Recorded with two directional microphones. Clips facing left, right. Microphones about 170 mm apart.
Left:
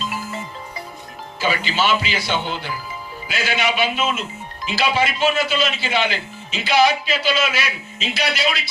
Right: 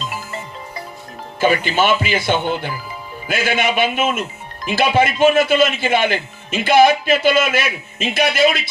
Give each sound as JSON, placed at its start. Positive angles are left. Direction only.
{"t": 0.0, "sound": "music", "side_deg": 0}
{"t": 1.4, "sound": "speech", "side_deg": -55}